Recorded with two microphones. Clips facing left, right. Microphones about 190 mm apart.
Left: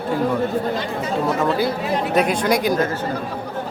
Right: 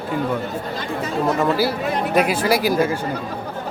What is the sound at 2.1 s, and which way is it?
Speech, 5° right (ahead or behind).